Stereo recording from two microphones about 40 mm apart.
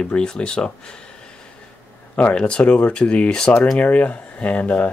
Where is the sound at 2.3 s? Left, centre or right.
Left.